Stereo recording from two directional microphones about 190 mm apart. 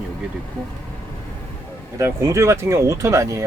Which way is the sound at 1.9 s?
15° right (ahead or behind).